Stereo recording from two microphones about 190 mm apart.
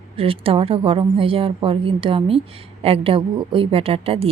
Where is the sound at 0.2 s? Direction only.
30° right (ahead or behind).